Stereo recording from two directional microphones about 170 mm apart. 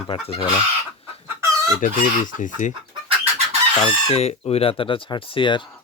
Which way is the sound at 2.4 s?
50° left (ahead or behind).